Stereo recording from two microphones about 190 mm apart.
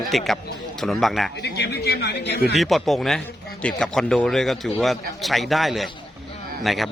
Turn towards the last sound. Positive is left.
turn(degrees=0)  # may be behind; listen again after turning